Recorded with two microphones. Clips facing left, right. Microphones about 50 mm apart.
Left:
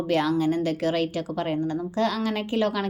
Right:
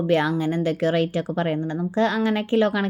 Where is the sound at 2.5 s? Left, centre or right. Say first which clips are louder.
Right 4 dB; right.